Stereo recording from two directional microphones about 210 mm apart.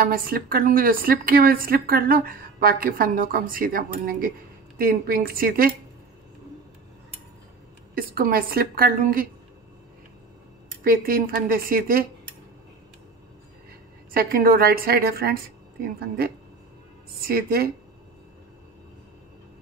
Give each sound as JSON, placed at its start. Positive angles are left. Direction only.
{"t": 0.0, "sound": "speech", "side_deg": -45}
{"t": 7.9, "sound": "speech", "side_deg": -45}
{"t": 10.8, "sound": "speech", "side_deg": -45}
{"t": 14.1, "sound": "speech", "side_deg": -45}
{"t": 17.3, "sound": "speech", "side_deg": -45}